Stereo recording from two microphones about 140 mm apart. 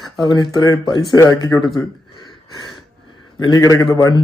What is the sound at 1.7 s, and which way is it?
Gasp, 30° left (ahead or behind).